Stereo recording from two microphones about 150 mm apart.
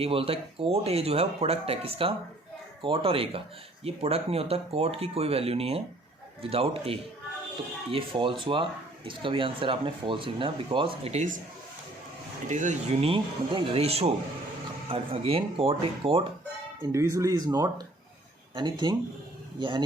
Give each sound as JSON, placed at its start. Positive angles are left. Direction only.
{"t": 0.0, "sound": "speech", "side_deg": -40}
{"t": 12.5, "sound": "speech", "side_deg": -55}
{"t": 13.1, "sound": "speech", "side_deg": -35}
{"t": 16.8, "sound": "speech", "side_deg": -20}